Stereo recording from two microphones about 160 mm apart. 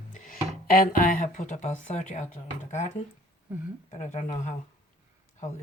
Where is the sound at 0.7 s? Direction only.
65° left (ahead or behind).